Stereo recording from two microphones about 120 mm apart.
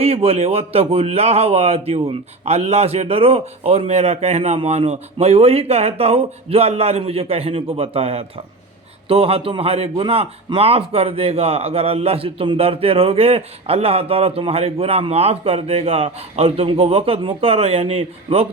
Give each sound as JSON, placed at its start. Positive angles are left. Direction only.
{"t": 0.0, "sound": "a man's voice", "side_deg": -55}